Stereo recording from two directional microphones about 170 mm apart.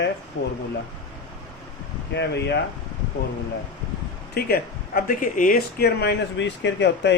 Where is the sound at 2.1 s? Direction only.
90° left.